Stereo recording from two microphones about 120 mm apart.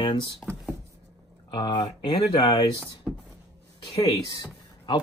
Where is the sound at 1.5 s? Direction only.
40° left (ahead or behind).